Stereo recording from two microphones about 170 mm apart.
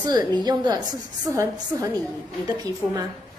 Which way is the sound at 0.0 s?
25° right (ahead or behind).